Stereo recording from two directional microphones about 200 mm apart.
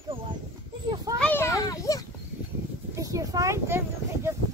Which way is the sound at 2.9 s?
15° right (ahead or behind).